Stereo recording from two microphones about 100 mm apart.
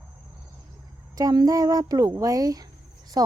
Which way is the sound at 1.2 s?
35° right (ahead or behind).